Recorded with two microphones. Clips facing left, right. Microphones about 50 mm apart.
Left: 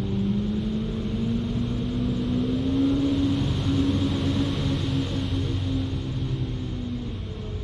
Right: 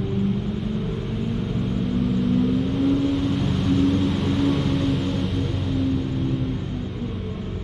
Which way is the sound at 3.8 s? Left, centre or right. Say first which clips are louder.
Right 2 dB; centre.